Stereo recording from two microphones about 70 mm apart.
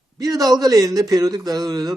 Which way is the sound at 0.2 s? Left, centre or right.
Right.